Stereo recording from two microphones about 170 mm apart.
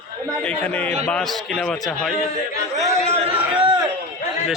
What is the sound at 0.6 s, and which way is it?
A man's voice, 10° left (ahead or behind).